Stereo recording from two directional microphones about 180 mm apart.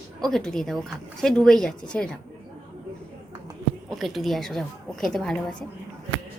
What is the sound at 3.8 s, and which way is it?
Speech, centre (ahead or behind).